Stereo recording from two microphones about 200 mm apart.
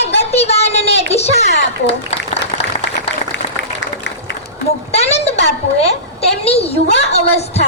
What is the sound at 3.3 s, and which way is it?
Applause, 60° left (ahead or behind).